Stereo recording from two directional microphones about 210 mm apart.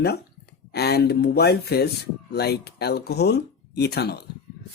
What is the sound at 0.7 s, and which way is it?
Speech, 50° left (ahead or behind).